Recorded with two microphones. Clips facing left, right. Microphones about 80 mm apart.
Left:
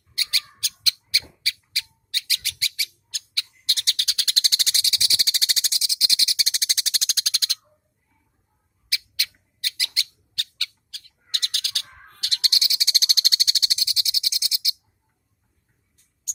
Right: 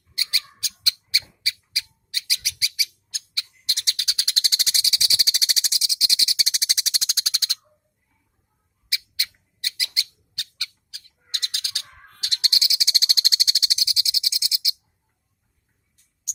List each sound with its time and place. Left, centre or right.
0.2 s bird: right
8.9 s bird: right
12.2 s frog: right